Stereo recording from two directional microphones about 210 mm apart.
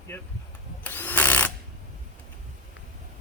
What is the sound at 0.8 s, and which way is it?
Drill, 10° left (ahead or behind).